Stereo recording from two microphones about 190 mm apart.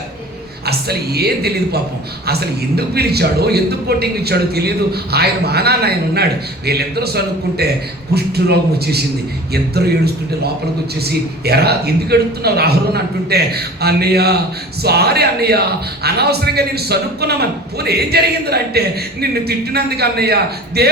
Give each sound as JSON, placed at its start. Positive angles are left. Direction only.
{"t": 0.6, "sound": "a man's voice", "side_deg": -55}
{"t": 11.0, "sound": "a man's voice", "side_deg": -55}